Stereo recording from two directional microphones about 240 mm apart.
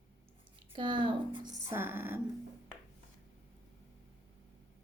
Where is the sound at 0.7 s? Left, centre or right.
Centre.